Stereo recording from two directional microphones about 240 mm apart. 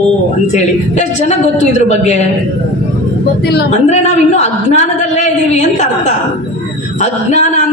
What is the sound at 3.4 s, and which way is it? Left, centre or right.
Speech, left.